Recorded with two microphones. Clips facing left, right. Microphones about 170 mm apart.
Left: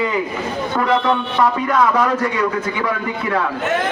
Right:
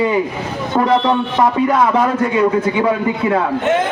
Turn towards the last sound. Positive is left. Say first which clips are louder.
# right 6 dB
turn(degrees=-25)  # may be behind; listen again after turning